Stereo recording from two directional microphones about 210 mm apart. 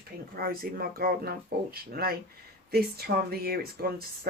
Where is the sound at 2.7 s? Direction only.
50° right (ahead or behind).